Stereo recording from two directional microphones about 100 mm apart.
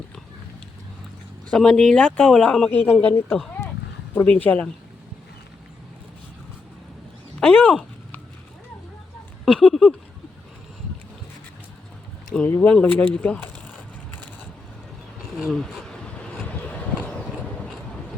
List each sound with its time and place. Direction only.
1.5 s speech: 10° left (ahead or behind)
4.4 s speech: 15° left (ahead or behind)
7.3 s speech: 15° left (ahead or behind)
9.5 s a sound: 5° left (ahead or behind)
12.5 s speech: 15° left (ahead or behind)
15.4 s vehicle: 5° left (ahead or behind)